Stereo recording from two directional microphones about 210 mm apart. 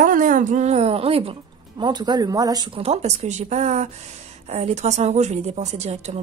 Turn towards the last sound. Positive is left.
turn(degrees=-30)  # may be behind; listen again after turning